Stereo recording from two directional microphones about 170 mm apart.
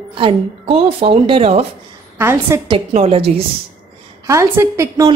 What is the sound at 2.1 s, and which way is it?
Speech, 15° right (ahead or behind).